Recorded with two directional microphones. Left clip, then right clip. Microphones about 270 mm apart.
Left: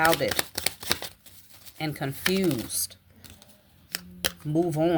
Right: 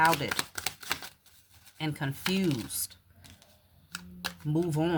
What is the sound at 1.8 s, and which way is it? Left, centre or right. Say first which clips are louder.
Speech: left 5 dB; centre.